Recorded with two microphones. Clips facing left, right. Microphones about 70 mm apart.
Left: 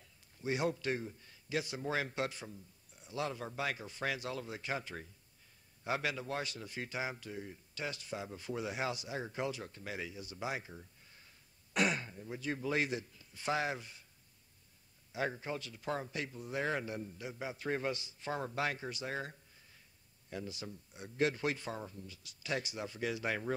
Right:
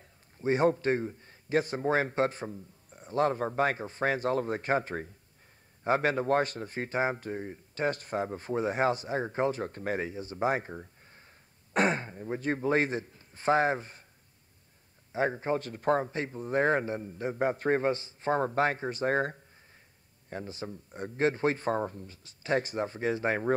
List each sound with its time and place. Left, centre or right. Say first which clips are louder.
0.0 s a man's voice: right 9 dB; right
15.1 s speech: right 9 dB; right